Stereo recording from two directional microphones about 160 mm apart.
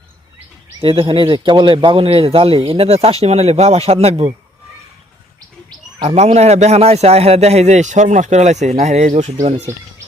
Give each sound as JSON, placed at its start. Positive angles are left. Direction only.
{"t": 0.8, "sound": "speech", "side_deg": -35}
{"t": 6.0, "sound": "speech", "side_deg": -45}